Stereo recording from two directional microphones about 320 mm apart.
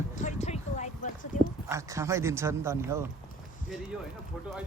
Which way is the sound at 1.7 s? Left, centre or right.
Centre.